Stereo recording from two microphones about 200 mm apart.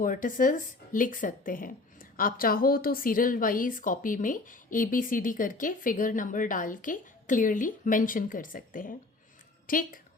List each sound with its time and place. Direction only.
0.0 s speech: 40° left (ahead or behind)